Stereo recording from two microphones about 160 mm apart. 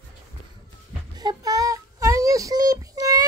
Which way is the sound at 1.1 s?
25° right (ahead or behind).